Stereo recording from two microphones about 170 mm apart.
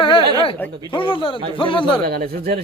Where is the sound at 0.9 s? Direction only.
30° left (ahead or behind).